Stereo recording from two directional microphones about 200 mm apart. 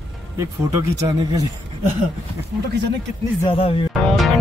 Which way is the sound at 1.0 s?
20° right (ahead or behind).